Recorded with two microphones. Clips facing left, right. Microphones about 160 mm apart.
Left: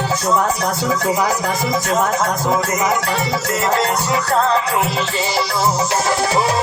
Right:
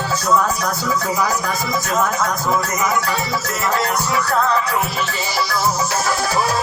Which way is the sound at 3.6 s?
35° left (ahead or behind).